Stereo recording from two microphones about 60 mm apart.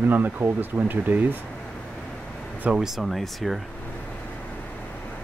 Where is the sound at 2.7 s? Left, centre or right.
Centre.